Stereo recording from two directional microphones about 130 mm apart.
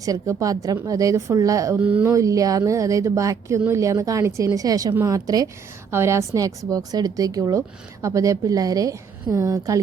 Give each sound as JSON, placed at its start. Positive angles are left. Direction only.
{"t": 0.0, "sound": "a woman's voice", "side_deg": -25}
{"t": 1.8, "sound": "speech", "side_deg": -10}
{"t": 2.1, "sound": "a woman's voice", "side_deg": -25}